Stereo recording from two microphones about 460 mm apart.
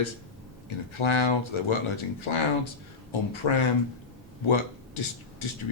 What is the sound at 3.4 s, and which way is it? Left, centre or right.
Speech, left.